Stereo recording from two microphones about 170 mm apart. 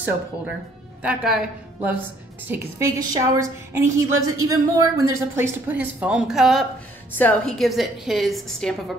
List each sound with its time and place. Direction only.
1.0 s a woman's voice: 5° right (ahead or behind)